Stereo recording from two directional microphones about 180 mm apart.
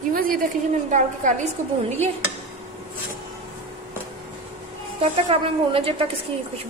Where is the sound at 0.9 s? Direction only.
45° right (ahead or behind).